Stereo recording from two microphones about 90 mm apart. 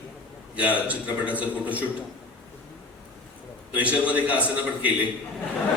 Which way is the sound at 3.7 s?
15° right (ahead or behind).